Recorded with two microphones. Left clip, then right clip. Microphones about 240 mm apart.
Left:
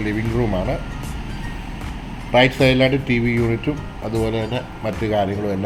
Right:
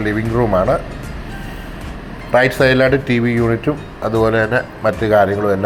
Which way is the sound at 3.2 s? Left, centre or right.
Right.